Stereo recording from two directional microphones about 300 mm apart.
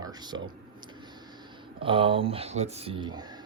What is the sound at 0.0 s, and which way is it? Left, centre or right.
Speech, centre.